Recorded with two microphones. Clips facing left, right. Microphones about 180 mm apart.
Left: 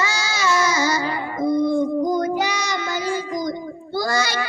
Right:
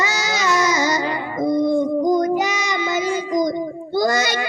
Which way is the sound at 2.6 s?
20° right (ahead or behind).